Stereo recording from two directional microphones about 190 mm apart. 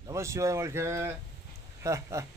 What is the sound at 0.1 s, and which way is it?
Speech, 15° right (ahead or behind).